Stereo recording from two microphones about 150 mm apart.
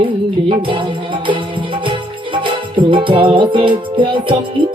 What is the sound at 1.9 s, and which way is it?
Music, 35° right (ahead or behind).